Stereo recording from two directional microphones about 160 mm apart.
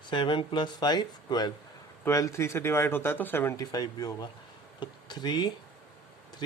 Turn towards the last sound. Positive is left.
turn(degrees=25)  # may be behind; listen again after turning